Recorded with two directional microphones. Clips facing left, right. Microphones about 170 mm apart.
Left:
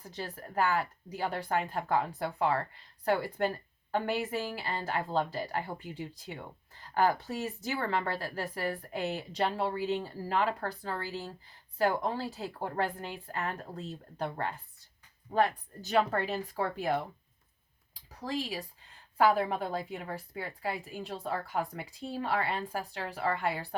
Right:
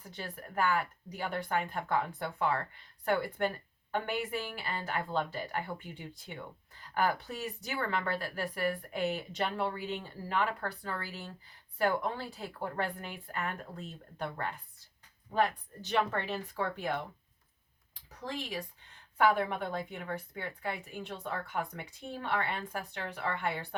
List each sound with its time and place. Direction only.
0.0 s speech: 35° left (ahead or behind)